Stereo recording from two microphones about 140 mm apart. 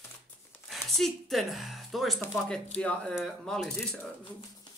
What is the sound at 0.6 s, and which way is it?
Speech, centre (ahead or behind).